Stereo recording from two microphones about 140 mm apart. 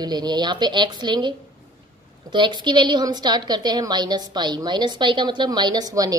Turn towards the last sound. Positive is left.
turn(degrees=-25)  # may be behind; listen again after turning